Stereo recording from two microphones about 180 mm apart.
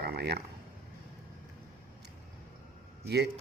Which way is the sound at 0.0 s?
60° right (ahead or behind).